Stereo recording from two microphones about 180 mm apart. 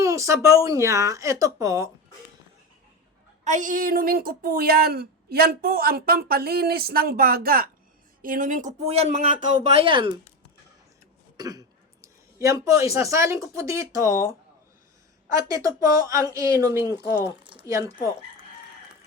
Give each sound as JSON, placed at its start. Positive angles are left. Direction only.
{"t": 0.0, "sound": "speech", "side_deg": -15}
{"t": 3.4, "sound": "a woman's voice", "side_deg": -45}
{"t": 11.3, "sound": "throat clearing", "side_deg": -20}
{"t": 12.0, "sound": "speech", "side_deg": -15}
{"t": 15.4, "sound": "speech", "side_deg": -20}
{"t": 17.2, "sound": "speech", "side_deg": -25}